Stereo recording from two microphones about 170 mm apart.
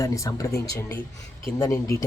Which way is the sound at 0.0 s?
20° left (ahead or behind).